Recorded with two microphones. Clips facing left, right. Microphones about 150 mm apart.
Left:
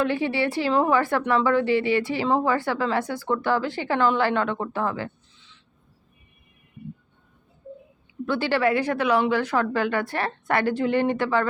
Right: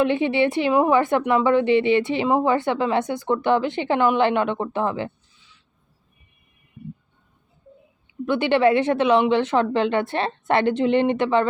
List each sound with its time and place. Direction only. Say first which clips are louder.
0.0 s a woman's voice: right 4 dB; 20° right (ahead or behind)
8.2 s a woman's voice: right 4 dB; 20° right (ahead or behind)